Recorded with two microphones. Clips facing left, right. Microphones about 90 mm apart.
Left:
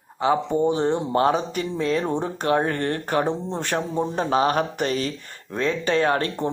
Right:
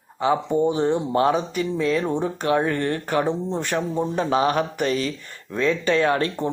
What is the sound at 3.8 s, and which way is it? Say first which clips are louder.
Speech: even; 25° left (ahead or behind).